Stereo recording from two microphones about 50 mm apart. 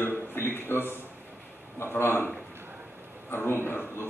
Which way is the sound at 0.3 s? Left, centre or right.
Left.